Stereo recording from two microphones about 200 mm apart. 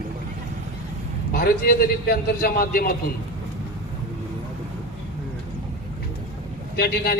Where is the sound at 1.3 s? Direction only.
50° left (ahead or behind).